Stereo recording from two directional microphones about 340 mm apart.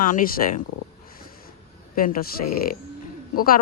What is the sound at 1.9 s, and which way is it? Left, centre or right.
Speech, left.